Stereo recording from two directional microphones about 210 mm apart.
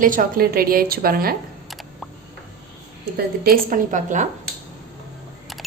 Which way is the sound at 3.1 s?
45° right (ahead or behind).